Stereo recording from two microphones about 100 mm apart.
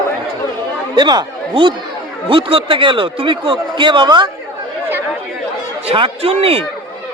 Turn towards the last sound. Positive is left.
turn(degrees=-75)  # may be behind; listen again after turning